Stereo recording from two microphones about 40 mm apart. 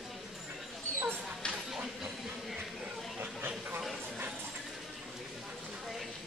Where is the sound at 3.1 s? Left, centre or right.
Right.